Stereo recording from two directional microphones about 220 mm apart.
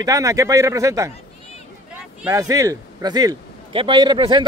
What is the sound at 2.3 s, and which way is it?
A man's voice, 15° right (ahead or behind).